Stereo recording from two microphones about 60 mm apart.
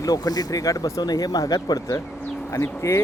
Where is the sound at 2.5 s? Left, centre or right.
Left.